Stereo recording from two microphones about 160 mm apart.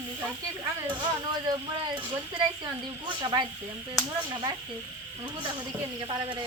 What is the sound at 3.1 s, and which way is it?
Speech, 30° right (ahead or behind).